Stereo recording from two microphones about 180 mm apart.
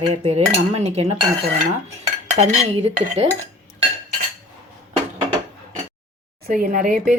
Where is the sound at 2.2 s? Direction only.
40° right (ahead or behind).